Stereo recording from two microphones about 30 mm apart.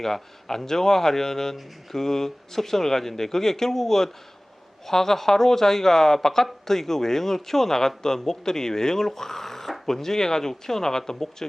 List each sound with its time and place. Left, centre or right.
0.0 s speech: centre